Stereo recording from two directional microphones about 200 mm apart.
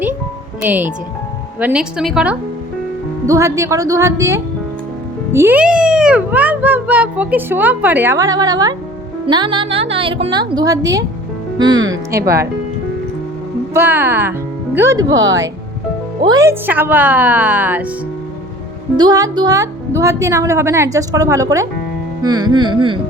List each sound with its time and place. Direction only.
0.6 s a child's voice: 10° right (ahead or behind)
3.2 s a child's voice: 15° right (ahead or behind)
13.7 s speech: 10° right (ahead or behind)
16.2 s a child's voice: 15° right (ahead or behind)
18.9 s a child's voice: 20° right (ahead or behind)